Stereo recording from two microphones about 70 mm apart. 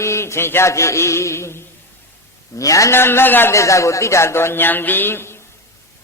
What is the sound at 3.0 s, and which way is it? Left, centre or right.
Speech, left.